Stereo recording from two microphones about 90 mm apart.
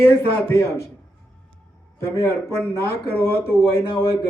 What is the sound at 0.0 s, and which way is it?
Speech, 25° left (ahead or behind).